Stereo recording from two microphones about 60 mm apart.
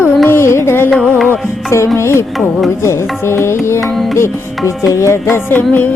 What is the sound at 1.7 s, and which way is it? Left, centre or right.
Music, left.